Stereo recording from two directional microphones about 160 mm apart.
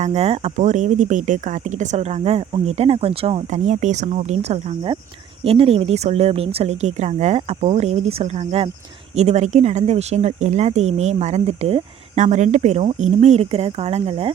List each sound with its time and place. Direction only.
0.0 s speech: 40° right (ahead or behind)